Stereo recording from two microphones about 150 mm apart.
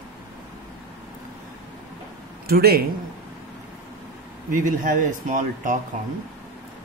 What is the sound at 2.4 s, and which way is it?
Speech, 90° right.